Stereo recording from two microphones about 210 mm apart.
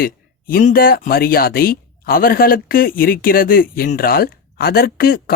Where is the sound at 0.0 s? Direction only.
45° left (ahead or behind).